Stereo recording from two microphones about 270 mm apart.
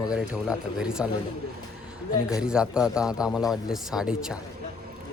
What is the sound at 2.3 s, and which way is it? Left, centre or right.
Speech, centre.